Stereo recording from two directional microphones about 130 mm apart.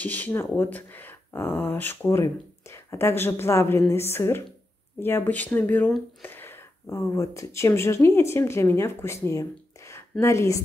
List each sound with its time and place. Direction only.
0.0 s a woman's voice: 10° left (ahead or behind)